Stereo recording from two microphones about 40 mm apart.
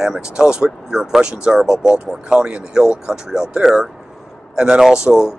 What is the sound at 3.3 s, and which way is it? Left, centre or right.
Speech, centre.